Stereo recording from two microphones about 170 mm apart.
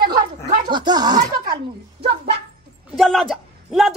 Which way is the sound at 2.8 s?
Centre (ahead or behind).